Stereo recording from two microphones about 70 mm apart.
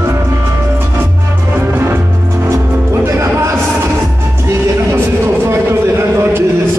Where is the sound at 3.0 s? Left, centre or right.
Right.